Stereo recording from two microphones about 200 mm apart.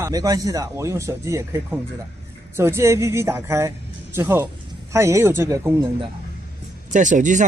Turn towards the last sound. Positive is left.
turn(degrees=-40)  # may be behind; listen again after turning